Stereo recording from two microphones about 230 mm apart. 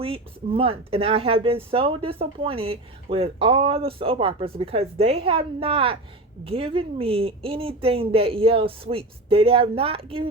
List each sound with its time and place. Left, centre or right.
0.0 s speech: right